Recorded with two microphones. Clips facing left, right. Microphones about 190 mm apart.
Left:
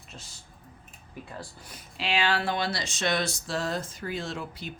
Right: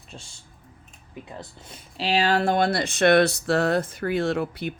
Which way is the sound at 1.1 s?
20° right (ahead or behind).